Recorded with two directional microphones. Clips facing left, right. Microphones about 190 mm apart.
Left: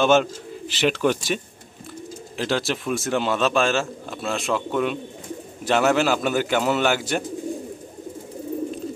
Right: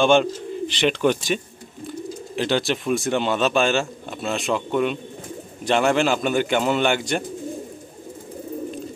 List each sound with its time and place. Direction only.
0.0 s speech: 5° left (ahead or behind)